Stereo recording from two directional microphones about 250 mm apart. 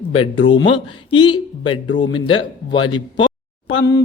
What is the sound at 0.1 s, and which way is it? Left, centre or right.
A woman's voice, left.